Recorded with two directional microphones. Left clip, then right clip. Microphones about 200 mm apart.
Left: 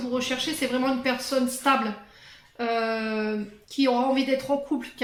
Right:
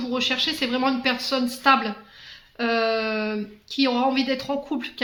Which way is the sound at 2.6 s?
30° right (ahead or behind).